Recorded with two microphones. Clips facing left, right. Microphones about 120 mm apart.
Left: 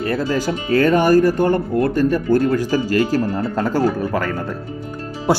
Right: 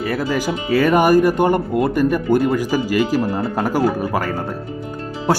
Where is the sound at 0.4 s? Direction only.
10° right (ahead or behind).